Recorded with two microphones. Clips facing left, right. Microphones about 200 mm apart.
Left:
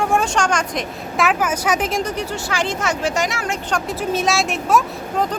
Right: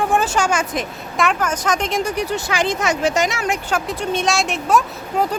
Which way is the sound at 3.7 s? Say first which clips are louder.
Left 3 dB; centre (ahead or behind).